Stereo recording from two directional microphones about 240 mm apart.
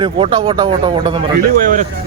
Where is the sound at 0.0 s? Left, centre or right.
Right.